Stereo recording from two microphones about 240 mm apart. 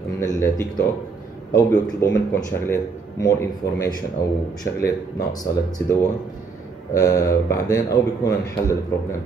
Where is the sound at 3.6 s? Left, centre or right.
Left.